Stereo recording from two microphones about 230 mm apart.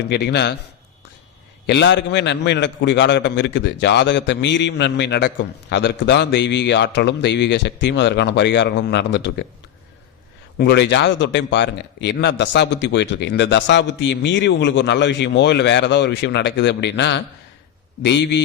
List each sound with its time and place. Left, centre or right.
0.1 s a man's voice: left
1.6 s a man's voice: left
10.6 s a man's voice: left